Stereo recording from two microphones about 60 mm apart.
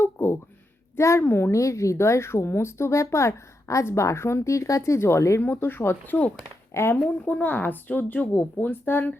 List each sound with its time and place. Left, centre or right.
0.0 s a sound: left
0.9 s a woman's voice: left
1.2 s a woman's voice: left
5.4 s a woman's voice: left
7.3 s speech: left